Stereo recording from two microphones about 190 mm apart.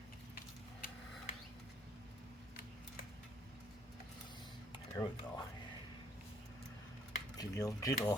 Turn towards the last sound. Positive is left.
turn(degrees=20)  # may be behind; listen again after turning